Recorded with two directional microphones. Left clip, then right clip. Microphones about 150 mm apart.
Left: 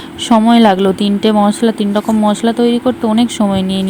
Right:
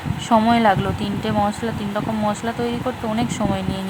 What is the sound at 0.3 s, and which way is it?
Speech, 30° left (ahead or behind).